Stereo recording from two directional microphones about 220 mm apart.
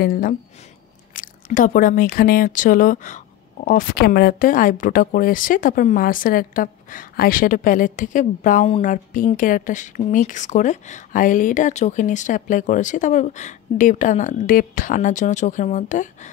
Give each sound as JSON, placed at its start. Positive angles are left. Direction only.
{"t": 0.0, "sound": "a woman's voice", "side_deg": 40}